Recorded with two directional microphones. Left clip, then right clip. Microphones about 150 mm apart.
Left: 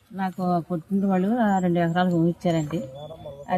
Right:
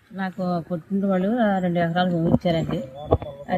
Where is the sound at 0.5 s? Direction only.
15° left (ahead or behind).